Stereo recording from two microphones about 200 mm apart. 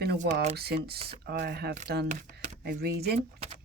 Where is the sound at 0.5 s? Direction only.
50° right (ahead or behind).